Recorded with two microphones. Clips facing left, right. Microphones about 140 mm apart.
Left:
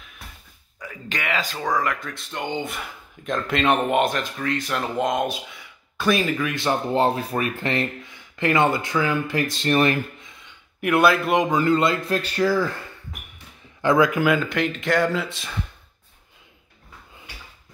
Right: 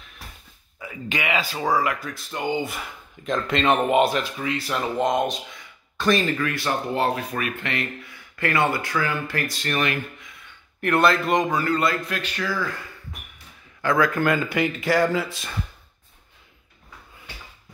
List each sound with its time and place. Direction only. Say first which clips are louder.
0.7 s speech: right 2 dB; 10° right (ahead or behind); by 6.5 s 5° left (ahead or behind)
6.5 s speech: left 3 dB; 20° left (ahead or behind)
10.8 s speech: left 1 dB; 10° left (ahead or behind)
11.5 s speech: left 3 dB; 25° left (ahead or behind)
12.1 s speech: left 7 dB; 35° left (ahead or behind)
13.7 s speech: left 3 dB; 20° left (ahead or behind)
14.2 s speech: left 1 dB; centre (ahead or behind)